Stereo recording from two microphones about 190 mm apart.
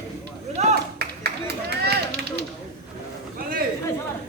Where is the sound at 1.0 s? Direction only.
55° right (ahead or behind).